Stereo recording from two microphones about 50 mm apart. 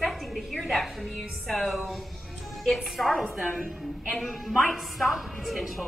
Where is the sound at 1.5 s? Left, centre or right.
Centre.